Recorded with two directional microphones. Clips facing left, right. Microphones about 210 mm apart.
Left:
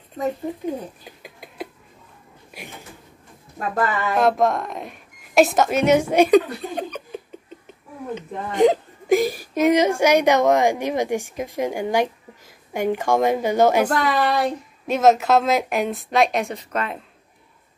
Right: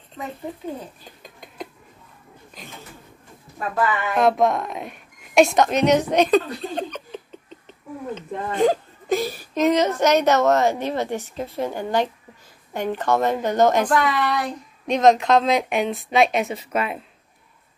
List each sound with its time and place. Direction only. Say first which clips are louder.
1.0 s a sound: left 2 dB; 5° left (ahead or behind)
3.5 s speech: even; 40° left (ahead or behind)
4.2 s speech: right 1 dB; centre (ahead or behind)
13.9 s speech: left 1 dB; 35° left (ahead or behind)
14.9 s a woman's voice: even; 5° left (ahead or behind)